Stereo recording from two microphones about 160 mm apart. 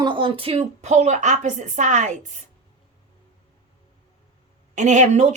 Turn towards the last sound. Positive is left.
turn(degrees=-45)  # may be behind; listen again after turning